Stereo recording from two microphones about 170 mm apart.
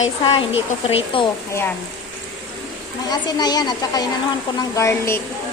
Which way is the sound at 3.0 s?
25° left (ahead or behind).